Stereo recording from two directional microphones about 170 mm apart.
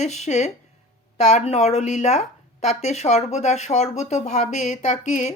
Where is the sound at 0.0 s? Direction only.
40° left (ahead or behind).